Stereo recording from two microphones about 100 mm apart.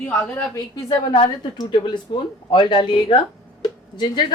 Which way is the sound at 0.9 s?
65° left (ahead or behind).